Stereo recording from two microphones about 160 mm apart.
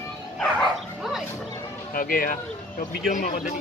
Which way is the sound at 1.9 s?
60° left (ahead or behind).